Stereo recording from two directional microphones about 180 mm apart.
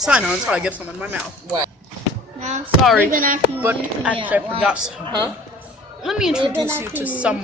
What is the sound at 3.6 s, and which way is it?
Speech, 10° right (ahead or behind).